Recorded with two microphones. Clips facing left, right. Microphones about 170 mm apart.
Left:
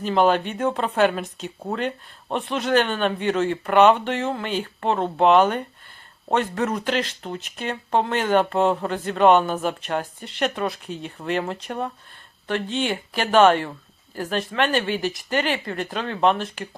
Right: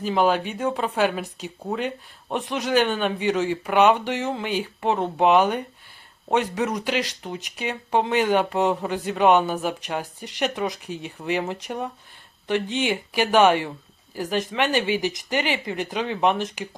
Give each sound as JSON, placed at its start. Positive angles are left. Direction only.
{"t": 0.0, "sound": "speech", "side_deg": -5}